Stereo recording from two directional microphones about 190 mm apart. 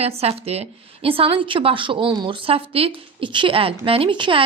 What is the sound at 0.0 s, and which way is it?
A woman's voice, 30° right (ahead or behind).